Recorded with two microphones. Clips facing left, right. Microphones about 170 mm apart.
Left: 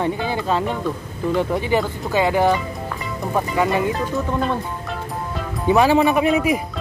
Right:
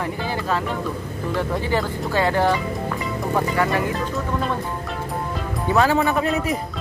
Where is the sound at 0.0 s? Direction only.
20° left (ahead or behind).